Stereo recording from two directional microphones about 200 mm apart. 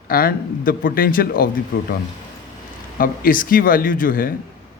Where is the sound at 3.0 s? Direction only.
45° left (ahead or behind).